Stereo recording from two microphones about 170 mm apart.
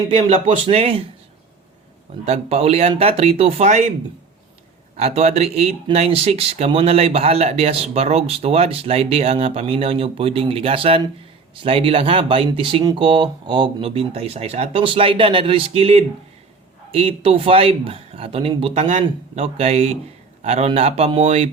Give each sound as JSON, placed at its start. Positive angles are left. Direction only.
{"t": 0.1, "sound": "speech", "side_deg": -40}
{"t": 2.2, "sound": "speech", "side_deg": -35}
{"t": 4.9, "sound": "speech", "side_deg": -40}